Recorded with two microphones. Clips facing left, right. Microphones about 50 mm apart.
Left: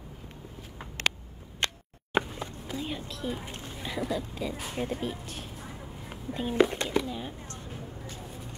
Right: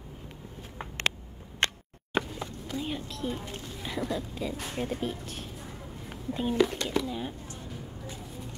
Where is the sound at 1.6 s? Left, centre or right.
Right.